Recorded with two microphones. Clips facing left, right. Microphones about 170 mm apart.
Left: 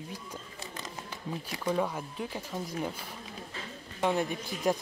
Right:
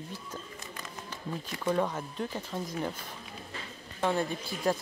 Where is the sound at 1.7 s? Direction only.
10° left (ahead or behind).